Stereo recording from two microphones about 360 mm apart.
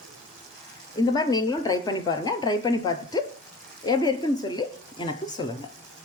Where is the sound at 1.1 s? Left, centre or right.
Centre.